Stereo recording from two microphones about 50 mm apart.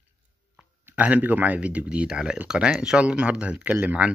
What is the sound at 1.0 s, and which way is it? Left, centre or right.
Speech, right.